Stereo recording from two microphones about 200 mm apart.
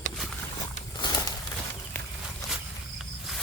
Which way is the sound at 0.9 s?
20° left (ahead or behind).